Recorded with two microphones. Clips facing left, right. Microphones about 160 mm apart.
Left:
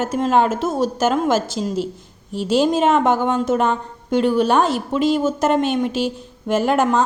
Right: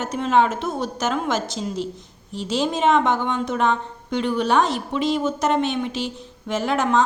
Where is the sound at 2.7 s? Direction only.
45° left (ahead or behind).